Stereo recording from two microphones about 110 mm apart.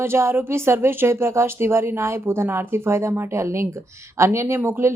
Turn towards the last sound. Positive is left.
turn(degrees=-25)  # may be behind; listen again after turning